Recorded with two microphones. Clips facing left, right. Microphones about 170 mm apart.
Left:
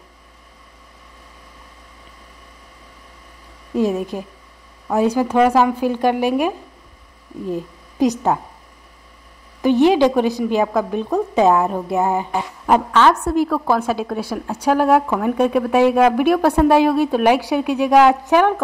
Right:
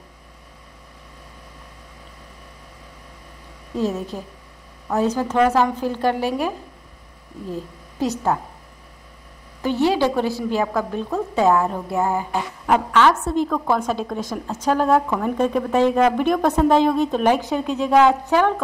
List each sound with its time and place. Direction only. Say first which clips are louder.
3.7 s a woman's voice: left 5 dB; 15° left (ahead or behind)
9.6 s a woman's voice: left 6 dB; 15° left (ahead or behind)
12.6 s a woman's voice: left 2 dB; 35° left (ahead or behind)
13.2 s a woman's voice: left 3 dB; 5° left (ahead or behind)